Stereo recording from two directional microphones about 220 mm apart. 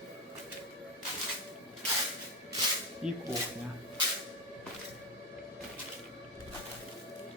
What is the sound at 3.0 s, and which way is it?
Speech, 5° right (ahead or behind).